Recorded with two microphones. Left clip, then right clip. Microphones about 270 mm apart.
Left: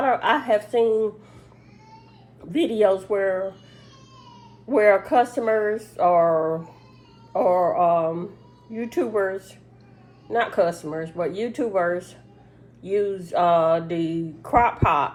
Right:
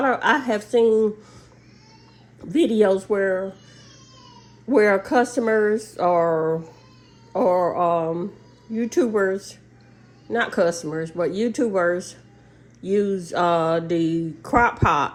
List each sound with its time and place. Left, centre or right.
0.0 s a woman's voice: right
2.4 s speech: right
4.7 s speech: right